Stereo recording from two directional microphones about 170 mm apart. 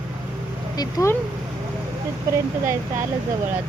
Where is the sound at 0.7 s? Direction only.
20° left (ahead or behind).